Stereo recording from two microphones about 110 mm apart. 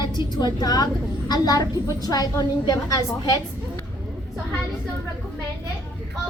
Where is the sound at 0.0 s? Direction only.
40° left (ahead or behind).